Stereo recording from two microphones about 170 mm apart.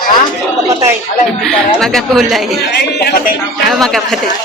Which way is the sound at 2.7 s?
70° left (ahead or behind).